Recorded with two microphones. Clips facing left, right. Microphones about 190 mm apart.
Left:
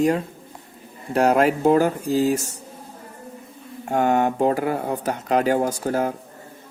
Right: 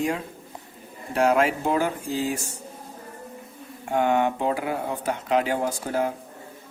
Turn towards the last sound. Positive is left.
turn(degrees=45)  # may be behind; listen again after turning